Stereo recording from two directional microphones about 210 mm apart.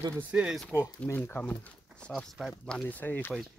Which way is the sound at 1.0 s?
10° left (ahead or behind).